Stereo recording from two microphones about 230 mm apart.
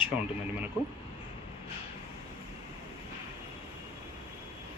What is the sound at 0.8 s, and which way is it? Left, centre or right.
Speech, centre.